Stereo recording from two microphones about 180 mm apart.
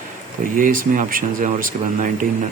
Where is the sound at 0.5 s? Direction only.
50° right (ahead or behind).